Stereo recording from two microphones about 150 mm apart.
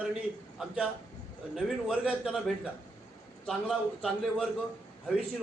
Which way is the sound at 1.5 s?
5° right (ahead or behind).